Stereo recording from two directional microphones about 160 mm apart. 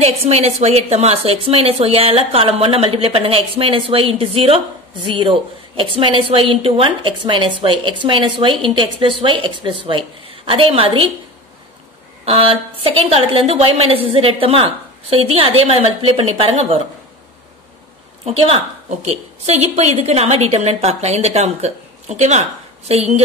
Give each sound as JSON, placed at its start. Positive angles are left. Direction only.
{"t": 0.0, "sound": "a woman's voice", "side_deg": -40}
{"t": 12.3, "sound": "a woman's voice", "side_deg": -35}
{"t": 18.2, "sound": "a woman's voice", "side_deg": -35}